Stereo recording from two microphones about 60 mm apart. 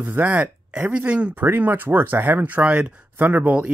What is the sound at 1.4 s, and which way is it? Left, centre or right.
Speech, right.